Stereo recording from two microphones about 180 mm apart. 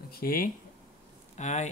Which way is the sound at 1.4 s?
40° left (ahead or behind).